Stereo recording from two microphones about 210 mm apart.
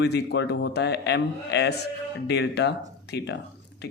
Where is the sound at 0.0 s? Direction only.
55° left (ahead or behind).